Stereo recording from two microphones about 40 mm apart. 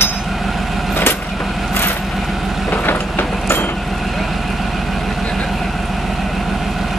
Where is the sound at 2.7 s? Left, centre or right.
Left.